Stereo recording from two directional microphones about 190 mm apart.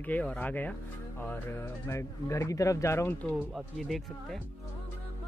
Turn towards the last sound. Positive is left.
turn(degrees=0)  # may be behind; listen again after turning